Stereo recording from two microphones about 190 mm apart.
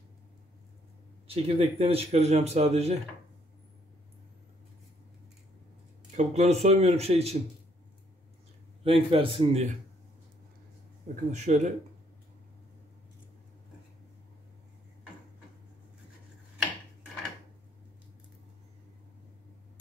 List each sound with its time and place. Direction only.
1.2 s speech: 30° right (ahead or behind)
6.1 s speech: 35° right (ahead or behind)
8.8 s a man's voice: 30° right (ahead or behind)
11.3 s speech: 35° right (ahead or behind)